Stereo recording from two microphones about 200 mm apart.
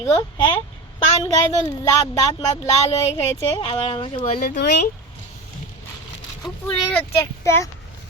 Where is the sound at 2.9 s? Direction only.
30° left (ahead or behind).